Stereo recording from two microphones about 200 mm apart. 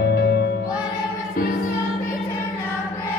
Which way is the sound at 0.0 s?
50° left (ahead or behind).